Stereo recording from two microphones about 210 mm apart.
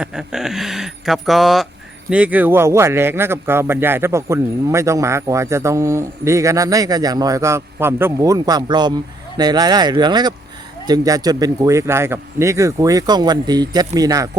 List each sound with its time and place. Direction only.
0.0 s speech: 5° right (ahead or behind)